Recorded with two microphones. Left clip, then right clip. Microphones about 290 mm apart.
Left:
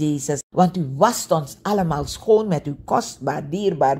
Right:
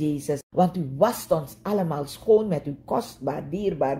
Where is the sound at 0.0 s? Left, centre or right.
Left.